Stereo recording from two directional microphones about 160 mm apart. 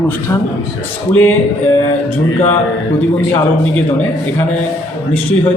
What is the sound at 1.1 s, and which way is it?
Speech, 15° left (ahead or behind).